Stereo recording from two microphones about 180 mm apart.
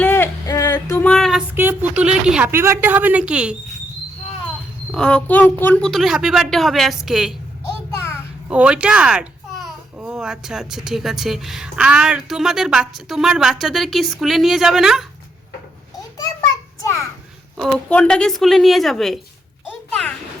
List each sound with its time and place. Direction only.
0.0 s a sound: 10° left (ahead or behind)
1.0 s child singing: 5° left (ahead or behind)
1.5 s a woman's voice: 10° right (ahead or behind)
4.9 s speech: 5° left (ahead or behind)
8.4 s speech: 5° right (ahead or behind)
16.0 s a sound: 20° left (ahead or behind)
17.6 s speech: 5° left (ahead or behind)